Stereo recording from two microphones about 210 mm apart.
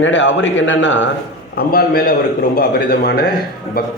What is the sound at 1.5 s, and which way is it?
A man's voice, 45° left (ahead or behind).